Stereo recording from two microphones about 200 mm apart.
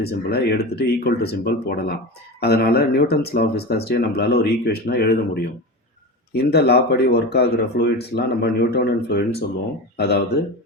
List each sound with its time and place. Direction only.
0.0 s speech: 50° left (ahead or behind)